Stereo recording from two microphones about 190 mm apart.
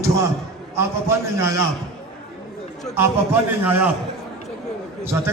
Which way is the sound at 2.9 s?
10° right (ahead or behind).